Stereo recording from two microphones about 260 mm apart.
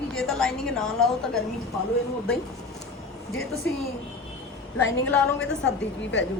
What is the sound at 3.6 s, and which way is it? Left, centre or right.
A woman's voice, centre.